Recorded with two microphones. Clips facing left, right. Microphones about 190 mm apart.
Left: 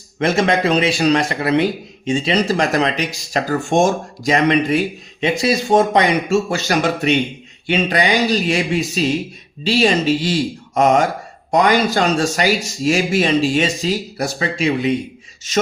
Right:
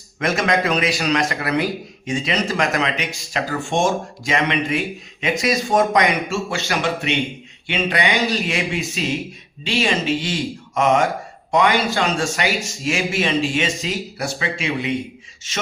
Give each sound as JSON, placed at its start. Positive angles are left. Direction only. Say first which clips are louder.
{"t": 0.2, "sound": "a man's voice", "louder": "left 4 dB", "side_deg": 30}